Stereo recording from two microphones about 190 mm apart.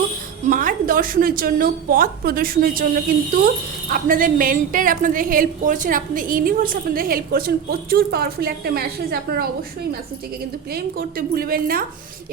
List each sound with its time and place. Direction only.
0.4 s a woman's voice: 45° right (ahead or behind)
10.7 s a woman's voice: 50° right (ahead or behind)